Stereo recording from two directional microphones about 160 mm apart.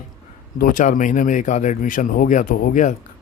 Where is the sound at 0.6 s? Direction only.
55° left (ahead or behind).